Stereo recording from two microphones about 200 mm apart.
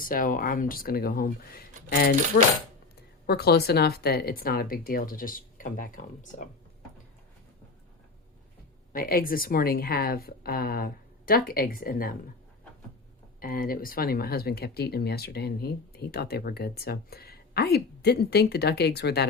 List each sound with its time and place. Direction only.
0.0 s speech: 45° left (ahead or behind)
8.9 s speech: 45° left (ahead or behind)
13.4 s speech: 45° left (ahead or behind)